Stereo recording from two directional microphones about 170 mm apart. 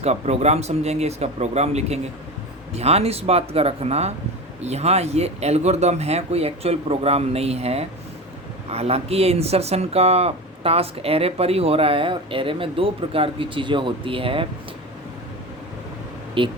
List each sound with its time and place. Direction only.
0.0 s speech: 40° right (ahead or behind)
16.4 s speech: 30° right (ahead or behind)